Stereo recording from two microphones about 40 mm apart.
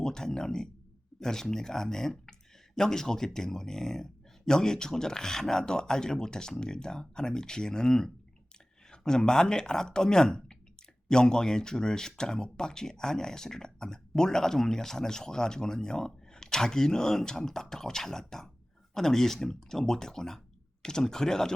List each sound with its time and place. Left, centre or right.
0.0 s speech: centre